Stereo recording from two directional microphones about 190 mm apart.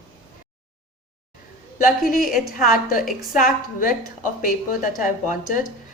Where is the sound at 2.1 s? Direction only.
45° left (ahead or behind).